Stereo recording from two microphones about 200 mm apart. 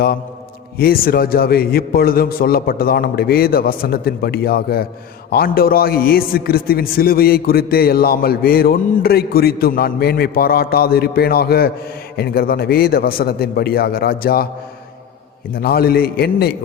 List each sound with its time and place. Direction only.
0.8 s a man's voice: 50° left (ahead or behind)
15.6 s a man's voice: 50° left (ahead or behind)